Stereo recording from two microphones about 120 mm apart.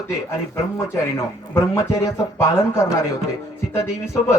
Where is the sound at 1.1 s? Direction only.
20° left (ahead or behind).